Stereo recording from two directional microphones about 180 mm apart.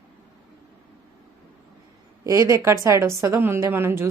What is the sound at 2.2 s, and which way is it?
Speech, 20° right (ahead or behind).